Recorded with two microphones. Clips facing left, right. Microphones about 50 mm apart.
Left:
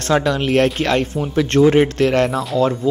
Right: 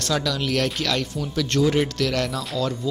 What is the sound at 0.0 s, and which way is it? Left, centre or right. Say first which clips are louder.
Speech: left 7 dB; left.